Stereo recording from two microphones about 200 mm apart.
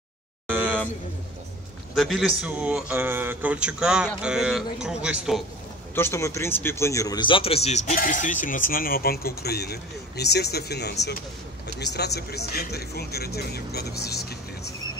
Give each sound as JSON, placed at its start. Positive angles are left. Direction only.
{"t": 2.0, "sound": "speech", "side_deg": 0}
{"t": 5.9, "sound": "a man's voice", "side_deg": 10}